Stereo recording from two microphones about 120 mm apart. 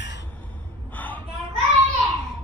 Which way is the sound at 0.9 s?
15° left (ahead or behind).